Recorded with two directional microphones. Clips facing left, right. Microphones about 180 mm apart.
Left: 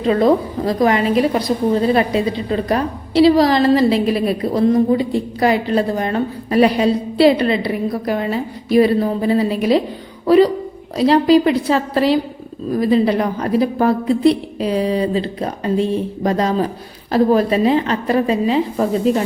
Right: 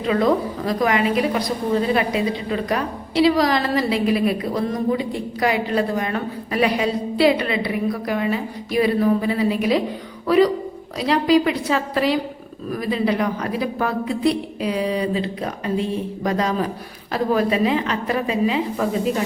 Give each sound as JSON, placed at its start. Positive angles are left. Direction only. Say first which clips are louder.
{"t": 0.1, "sound": "a woman's voice", "louder": "left 4 dB", "side_deg": 35}